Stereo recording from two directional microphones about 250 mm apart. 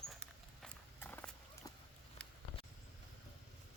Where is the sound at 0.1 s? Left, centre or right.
Centre.